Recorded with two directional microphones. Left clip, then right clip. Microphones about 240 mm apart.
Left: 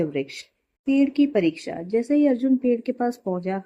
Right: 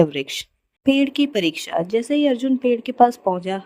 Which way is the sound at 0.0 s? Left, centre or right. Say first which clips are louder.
Right 7 dB; right.